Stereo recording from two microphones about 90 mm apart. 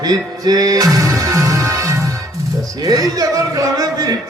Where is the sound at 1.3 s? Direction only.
35° right (ahead or behind).